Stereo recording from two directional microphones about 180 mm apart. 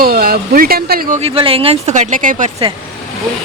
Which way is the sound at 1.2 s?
30° right (ahead or behind).